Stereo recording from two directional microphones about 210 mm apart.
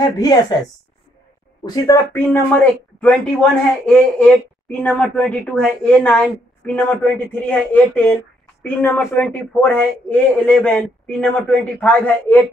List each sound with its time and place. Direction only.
0.0 s a man's voice: 20° left (ahead or behind)
1.6 s a man's voice: 15° left (ahead or behind)